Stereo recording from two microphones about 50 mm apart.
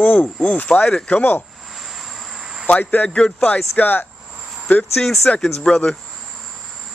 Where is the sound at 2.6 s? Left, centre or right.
Left.